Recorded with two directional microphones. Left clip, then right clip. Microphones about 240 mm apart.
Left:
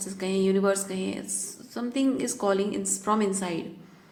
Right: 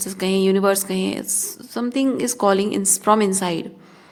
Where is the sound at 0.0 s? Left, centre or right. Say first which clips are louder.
Right 7 dB; right.